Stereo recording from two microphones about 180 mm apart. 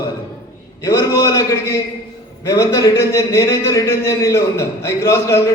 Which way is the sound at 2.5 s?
20° left (ahead or behind).